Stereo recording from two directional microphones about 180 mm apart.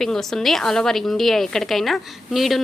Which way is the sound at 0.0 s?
Centre (ahead or behind).